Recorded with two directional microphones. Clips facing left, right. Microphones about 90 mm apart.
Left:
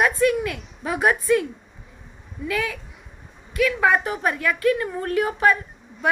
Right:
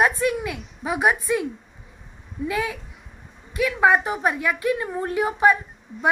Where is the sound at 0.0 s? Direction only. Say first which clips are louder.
Left 1 dB; 20° right (ahead or behind).